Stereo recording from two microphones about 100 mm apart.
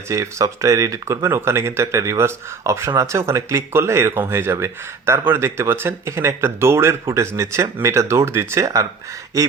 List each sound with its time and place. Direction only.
0.1 s speech: 30° right (ahead or behind)